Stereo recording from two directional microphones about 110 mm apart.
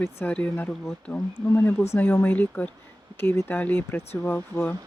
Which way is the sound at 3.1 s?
25° left (ahead or behind).